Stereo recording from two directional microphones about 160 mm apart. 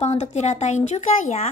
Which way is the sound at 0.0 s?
45° left (ahead or behind).